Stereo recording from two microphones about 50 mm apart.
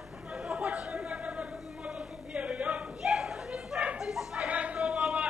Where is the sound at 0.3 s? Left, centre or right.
Right.